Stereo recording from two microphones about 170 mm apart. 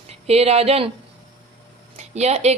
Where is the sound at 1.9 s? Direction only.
40° right (ahead or behind).